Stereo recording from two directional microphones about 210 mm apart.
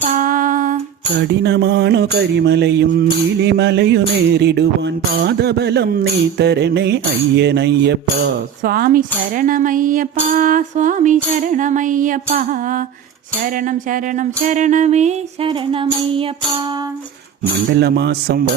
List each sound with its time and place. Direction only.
0.2 s a sound: 40° right (ahead or behind)
1.3 s mantra: 55° right (ahead or behind)
10.3 s music: 40° right (ahead or behind)
13.9 s music: 35° right (ahead or behind)
17.4 s mantra: 50° right (ahead or behind)